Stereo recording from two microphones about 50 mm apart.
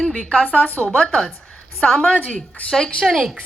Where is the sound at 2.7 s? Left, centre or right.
Centre.